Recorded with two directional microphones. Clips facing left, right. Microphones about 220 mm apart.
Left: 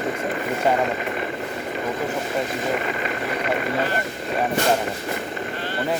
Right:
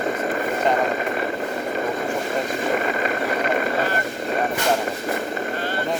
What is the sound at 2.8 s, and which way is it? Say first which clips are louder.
Vehicle: right 3 dB; 45° right (ahead or behind).